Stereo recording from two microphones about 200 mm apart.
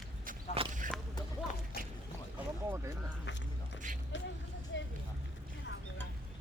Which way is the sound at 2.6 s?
15° right (ahead or behind).